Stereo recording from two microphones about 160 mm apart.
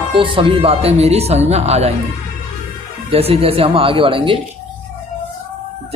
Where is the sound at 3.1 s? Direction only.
40° right (ahead or behind).